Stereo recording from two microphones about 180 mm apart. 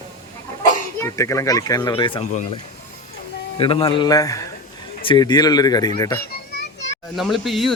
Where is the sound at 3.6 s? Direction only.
30° left (ahead or behind).